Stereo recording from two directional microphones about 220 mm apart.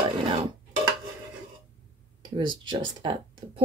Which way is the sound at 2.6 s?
20° right (ahead or behind).